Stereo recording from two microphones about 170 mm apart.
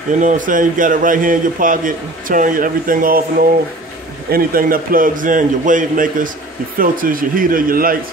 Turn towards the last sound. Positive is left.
turn(degrees=-60)  # may be behind; listen again after turning